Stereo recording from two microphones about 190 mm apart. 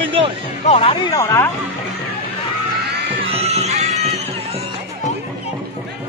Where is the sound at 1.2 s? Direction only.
15° left (ahead or behind).